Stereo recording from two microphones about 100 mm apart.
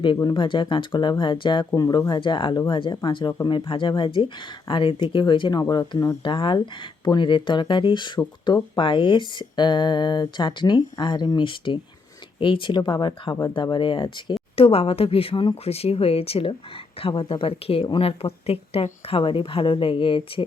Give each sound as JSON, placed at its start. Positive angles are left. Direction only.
{"t": 0.3, "sound": "speech", "side_deg": 55}
{"t": 1.7, "sound": "speech", "side_deg": 40}
{"t": 5.6, "sound": "speech", "side_deg": 30}
{"t": 6.2, "sound": "a woman's voice", "side_deg": 55}
{"t": 14.5, "sound": "a woman's voice", "side_deg": 75}